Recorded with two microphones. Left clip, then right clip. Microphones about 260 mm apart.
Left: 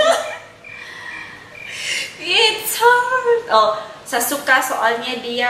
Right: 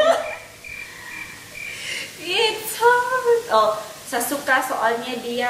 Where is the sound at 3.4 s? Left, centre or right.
Right.